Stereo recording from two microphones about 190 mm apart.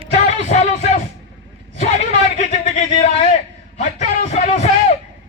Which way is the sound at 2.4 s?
35° left (ahead or behind).